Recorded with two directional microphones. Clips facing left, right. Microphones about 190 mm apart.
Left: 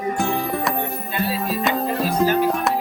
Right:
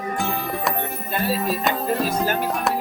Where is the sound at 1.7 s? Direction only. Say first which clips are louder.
Left 3 dB; centre (ahead or behind).